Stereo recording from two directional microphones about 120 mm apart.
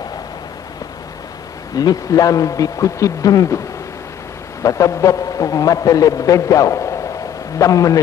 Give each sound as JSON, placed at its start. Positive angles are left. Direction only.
{"t": 1.8, "sound": "a man's voice", "side_deg": 30}
{"t": 4.6, "sound": "a man's voice", "side_deg": 25}